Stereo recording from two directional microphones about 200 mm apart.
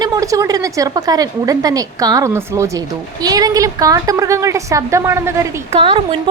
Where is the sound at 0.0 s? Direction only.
15° right (ahead or behind).